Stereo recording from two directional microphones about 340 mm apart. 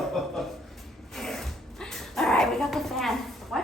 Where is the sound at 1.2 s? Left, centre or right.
Centre.